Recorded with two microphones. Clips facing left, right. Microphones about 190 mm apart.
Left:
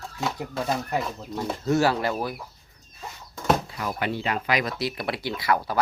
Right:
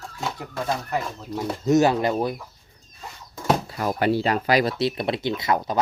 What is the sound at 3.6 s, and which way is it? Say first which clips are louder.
Speech: right 6 dB; 40° right (ahead or behind).